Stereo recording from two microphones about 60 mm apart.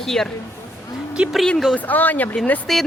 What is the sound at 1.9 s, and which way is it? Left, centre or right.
Speech, left.